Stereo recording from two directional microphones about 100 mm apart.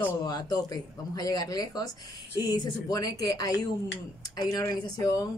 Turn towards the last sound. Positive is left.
turn(degrees=40)  # may be behind; listen again after turning